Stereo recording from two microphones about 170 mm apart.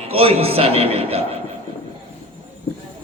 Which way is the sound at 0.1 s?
35° right (ahead or behind).